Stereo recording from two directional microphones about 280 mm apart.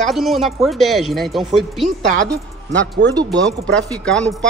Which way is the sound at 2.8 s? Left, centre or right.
Right.